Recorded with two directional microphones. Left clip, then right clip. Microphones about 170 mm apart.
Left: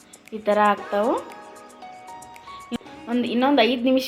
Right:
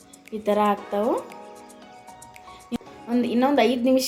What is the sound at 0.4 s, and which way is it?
Speech, 15° right (ahead or behind).